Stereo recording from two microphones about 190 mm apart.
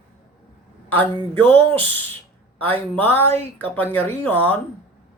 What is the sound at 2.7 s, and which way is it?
Speech, 10° left (ahead or behind).